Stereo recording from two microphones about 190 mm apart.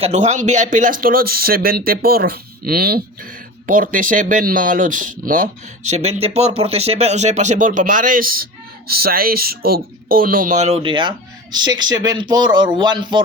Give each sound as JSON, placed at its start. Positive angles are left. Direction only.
{"t": 0.0, "sound": "speech", "side_deg": -35}